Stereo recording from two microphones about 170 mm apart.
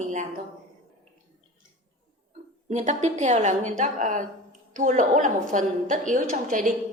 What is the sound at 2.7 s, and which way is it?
A woman's voice, 45° right (ahead or behind).